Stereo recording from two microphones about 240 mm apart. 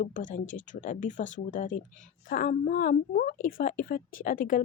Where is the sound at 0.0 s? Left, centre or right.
Left.